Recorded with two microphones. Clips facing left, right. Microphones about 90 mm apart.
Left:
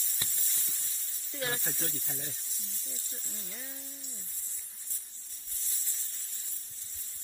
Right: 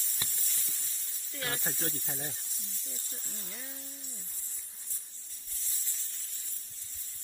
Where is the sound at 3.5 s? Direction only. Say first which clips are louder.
Even; centre (ahead or behind).